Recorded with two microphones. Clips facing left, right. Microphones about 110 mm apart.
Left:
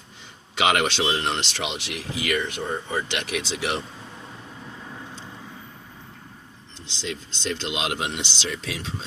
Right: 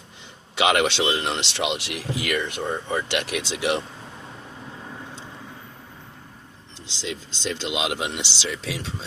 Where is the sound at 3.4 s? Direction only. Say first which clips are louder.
Right 2 dB; 5° right (ahead or behind).